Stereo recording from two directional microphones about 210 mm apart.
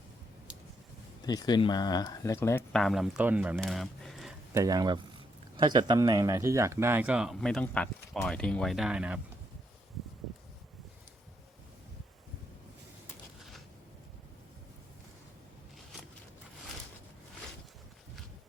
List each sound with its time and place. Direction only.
1.2 s speech: 20° left (ahead or behind); by 3.6 s 10° right (ahead or behind)
3.6 s a sound: centre (ahead or behind)
4.5 s speech: 15° right (ahead or behind)